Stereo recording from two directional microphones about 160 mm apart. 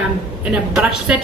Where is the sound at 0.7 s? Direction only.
5° right (ahead or behind).